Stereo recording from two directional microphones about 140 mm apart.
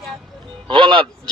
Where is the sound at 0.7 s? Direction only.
35° right (ahead or behind).